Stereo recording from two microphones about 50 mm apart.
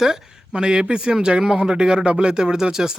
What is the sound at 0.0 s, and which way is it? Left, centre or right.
Speech, centre.